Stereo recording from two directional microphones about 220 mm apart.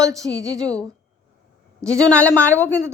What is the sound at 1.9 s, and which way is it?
Speech, 15° right (ahead or behind).